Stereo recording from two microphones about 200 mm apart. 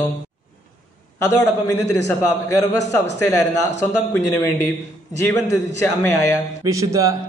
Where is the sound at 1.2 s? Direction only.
15° left (ahead or behind).